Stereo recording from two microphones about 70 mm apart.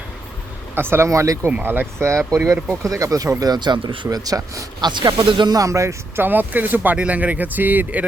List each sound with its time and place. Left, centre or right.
0.8 s speech: right
1.6 s speech: right
2.0 s speech: right
5.6 s speech: right
6.1 s speech: right